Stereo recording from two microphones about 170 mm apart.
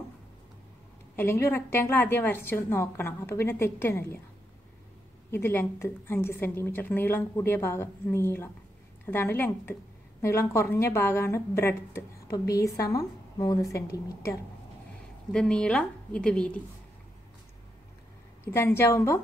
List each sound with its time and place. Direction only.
1.1 s a woman's voice: 15° left (ahead or behind)
5.3 s a woman's voice: 10° left (ahead or behind)
15.3 s a woman's voice: 5° left (ahead or behind)
18.4 s a woman's voice: 15° left (ahead or behind)